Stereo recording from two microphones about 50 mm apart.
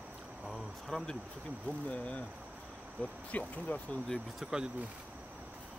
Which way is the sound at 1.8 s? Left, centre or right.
Left.